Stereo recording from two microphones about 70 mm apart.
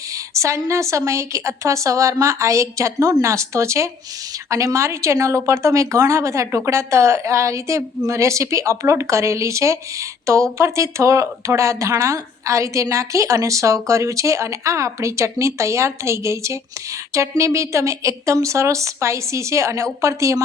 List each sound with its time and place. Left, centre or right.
0.1 s a woman's voice: right